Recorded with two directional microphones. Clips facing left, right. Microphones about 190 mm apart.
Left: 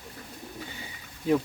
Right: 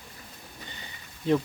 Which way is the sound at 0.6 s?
5° left (ahead or behind).